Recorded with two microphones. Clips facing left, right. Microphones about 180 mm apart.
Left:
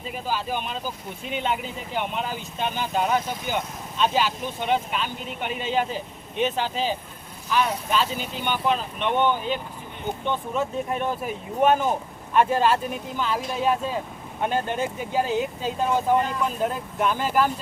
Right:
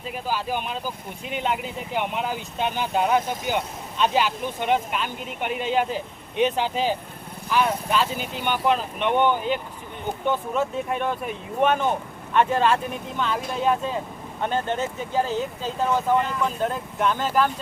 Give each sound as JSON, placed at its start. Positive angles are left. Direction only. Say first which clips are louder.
{"t": 0.3, "sound": "speech", "louder": "right 1 dB", "side_deg": -10}
{"t": 5.5, "sound": "speech", "louder": "right 3 dB", "side_deg": -55}
{"t": 6.4, "sound": "speech", "louder": "right 3 dB", "side_deg": -15}
{"t": 10.2, "sound": "speech", "louder": "right 3 dB", "side_deg": 0}